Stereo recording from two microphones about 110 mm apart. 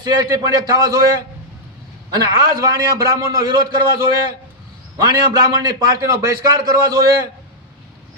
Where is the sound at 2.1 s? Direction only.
35° right (ahead or behind).